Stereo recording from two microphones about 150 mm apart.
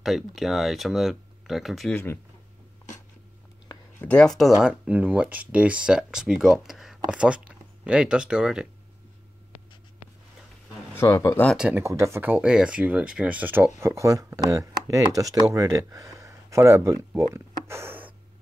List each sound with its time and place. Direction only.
0.0 s speech: centre (ahead or behind)
4.1 s speech: 5° left (ahead or behind)
4.6 s speech: 5° right (ahead or behind)
11.0 s speech: 20° left (ahead or behind)
11.5 s speech: 5° right (ahead or behind)
11.8 s speech: 20° right (ahead or behind)
17.3 s a sound: 15° right (ahead or behind)